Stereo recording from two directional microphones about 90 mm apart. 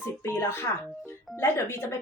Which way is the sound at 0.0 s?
25° left (ahead or behind).